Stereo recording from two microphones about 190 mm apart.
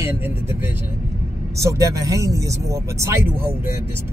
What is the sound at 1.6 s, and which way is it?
Speech, 15° right (ahead or behind).